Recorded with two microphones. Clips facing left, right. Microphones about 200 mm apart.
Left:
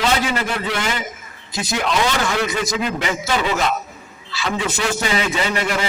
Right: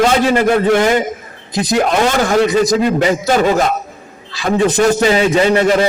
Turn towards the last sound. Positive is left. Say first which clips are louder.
# right 10 dB
turn(degrees=-40)  # may be behind; listen again after turning